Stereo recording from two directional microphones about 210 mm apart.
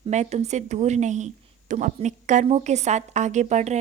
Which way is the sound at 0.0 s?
30° right (ahead or behind).